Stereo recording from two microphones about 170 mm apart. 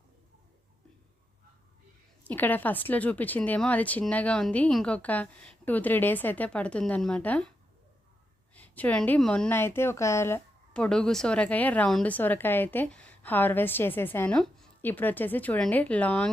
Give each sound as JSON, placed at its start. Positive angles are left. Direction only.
{"t": 2.2, "sound": "a woman's voice", "side_deg": 10}
{"t": 8.5, "sound": "a woman's voice", "side_deg": 10}
{"t": 10.8, "sound": "a woman's voice", "side_deg": 5}